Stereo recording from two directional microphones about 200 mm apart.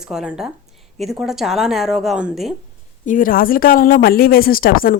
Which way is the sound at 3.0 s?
40° left (ahead or behind).